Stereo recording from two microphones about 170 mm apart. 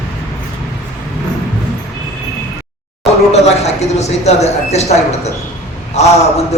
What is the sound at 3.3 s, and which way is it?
Speech, 40° left (ahead or behind).